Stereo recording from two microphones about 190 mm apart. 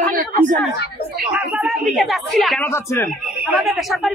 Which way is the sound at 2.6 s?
15° left (ahead or behind).